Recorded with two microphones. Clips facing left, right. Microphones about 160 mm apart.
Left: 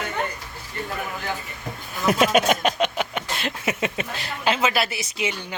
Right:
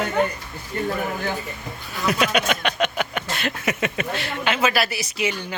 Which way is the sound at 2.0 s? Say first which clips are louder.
Left 3 dB; 45° left (ahead or behind).